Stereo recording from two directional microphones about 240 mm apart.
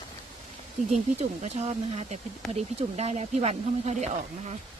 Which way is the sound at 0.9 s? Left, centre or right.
Right.